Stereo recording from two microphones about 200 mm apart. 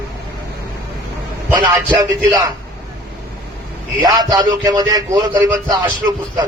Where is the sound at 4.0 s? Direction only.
20° right (ahead or behind).